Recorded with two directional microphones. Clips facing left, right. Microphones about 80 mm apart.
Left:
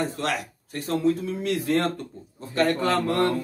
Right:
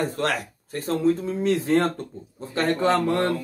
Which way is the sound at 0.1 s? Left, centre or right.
Right.